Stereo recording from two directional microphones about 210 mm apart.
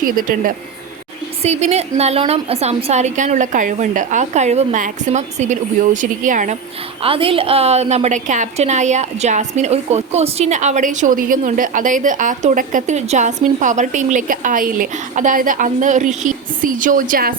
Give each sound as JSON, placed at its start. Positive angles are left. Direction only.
{"t": 0.0, "sound": "speech", "side_deg": -40}
{"t": 1.4, "sound": "a woman's voice", "side_deg": -30}
{"t": 7.0, "sound": "a woman's voice", "side_deg": -25}